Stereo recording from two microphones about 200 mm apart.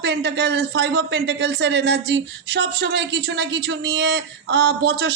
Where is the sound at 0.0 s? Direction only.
60° right (ahead or behind).